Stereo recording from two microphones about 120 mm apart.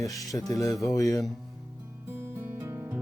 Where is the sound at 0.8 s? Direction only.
30° left (ahead or behind).